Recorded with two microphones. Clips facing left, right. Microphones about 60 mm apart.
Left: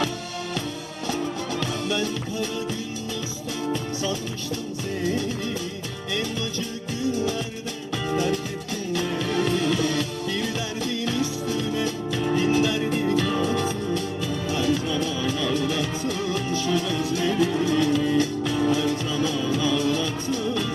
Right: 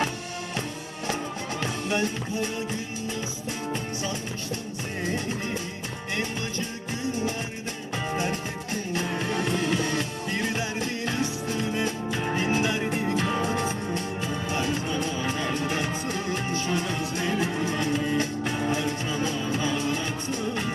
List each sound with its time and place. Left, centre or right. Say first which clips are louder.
1.9 s music: left 1 dB; right
5.0 s music: left 3 dB; right
7.1 s music: left 4 dB; right